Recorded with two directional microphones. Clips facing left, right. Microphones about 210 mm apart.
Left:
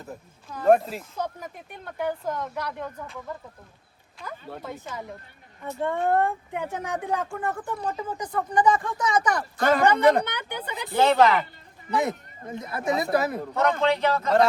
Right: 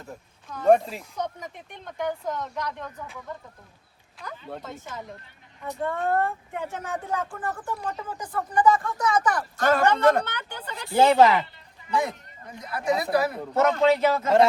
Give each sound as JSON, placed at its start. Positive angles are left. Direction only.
{"t": 0.4, "sound": "speech", "side_deg": 5}
{"t": 4.2, "sound": "speech", "side_deg": 0}
{"t": 5.8, "sound": "speech", "side_deg": 20}
{"t": 8.3, "sound": "speech", "side_deg": 20}
{"t": 10.9, "sound": "a woman's voice", "side_deg": -10}
{"t": 11.9, "sound": "a woman's voice", "side_deg": 25}
{"t": 13.6, "sound": "speech", "side_deg": -5}